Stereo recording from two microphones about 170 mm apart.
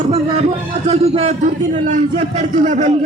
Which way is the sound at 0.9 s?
35° right (ahead or behind).